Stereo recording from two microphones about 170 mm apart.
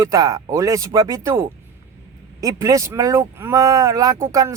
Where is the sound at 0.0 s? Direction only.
20° right (ahead or behind).